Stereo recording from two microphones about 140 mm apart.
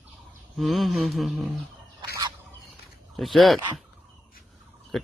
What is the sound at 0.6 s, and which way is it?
Mantra, centre (ahead or behind).